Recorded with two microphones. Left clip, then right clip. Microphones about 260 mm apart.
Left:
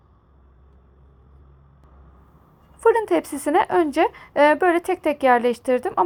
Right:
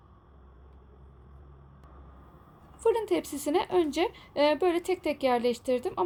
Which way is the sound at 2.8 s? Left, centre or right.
Centre.